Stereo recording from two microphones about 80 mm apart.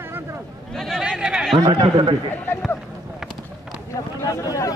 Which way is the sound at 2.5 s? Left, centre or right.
Left.